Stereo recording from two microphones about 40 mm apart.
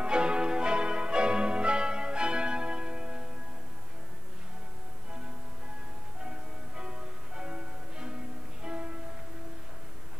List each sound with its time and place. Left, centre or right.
0.0 s music: right
6.2 s music: right